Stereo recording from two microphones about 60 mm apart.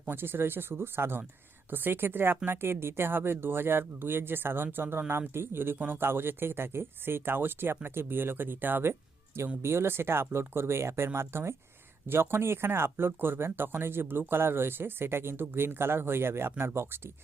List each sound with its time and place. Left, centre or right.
0.1 s speech: right
8.9 s music: right
9.6 s speech: right